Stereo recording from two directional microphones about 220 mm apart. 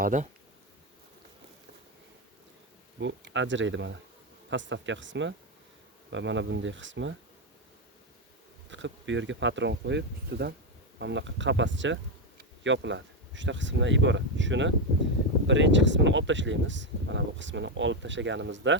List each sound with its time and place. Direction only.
0.0 s speech: 35° right (ahead or behind)
3.0 s speech: 55° right (ahead or behind)
8.7 s speech: 55° right (ahead or behind)